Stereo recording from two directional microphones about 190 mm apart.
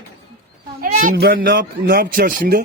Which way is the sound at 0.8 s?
45° right (ahead or behind).